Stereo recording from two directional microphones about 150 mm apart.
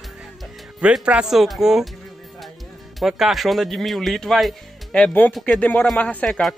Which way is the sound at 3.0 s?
5° right (ahead or behind).